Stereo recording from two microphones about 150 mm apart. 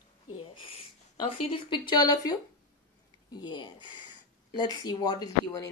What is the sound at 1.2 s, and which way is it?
Speech, 35° left (ahead or behind).